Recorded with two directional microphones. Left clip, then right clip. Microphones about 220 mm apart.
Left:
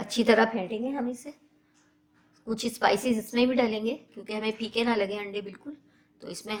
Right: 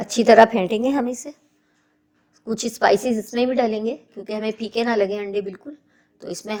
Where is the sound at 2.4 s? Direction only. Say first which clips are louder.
Right 6 dB; 25° right (ahead or behind).